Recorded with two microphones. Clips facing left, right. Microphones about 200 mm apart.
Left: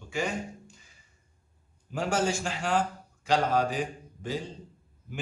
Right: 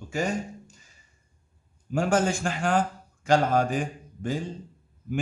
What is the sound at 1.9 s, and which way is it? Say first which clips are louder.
A man's voice: right 4 dB; 50° right (ahead or behind).